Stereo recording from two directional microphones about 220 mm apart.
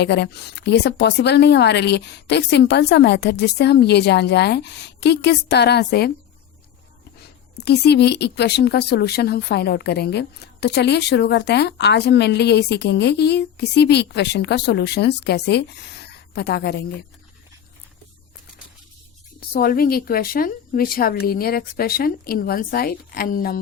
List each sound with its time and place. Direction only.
0.0 s speech: 50° left (ahead or behind)
7.6 s speech: 50° left (ahead or behind)
19.4 s speech: 40° left (ahead or behind)